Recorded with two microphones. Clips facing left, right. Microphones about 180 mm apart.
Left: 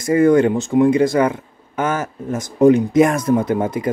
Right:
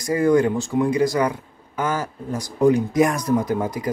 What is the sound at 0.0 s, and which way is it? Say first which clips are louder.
Speech: left 4 dB; 25° left (ahead or behind).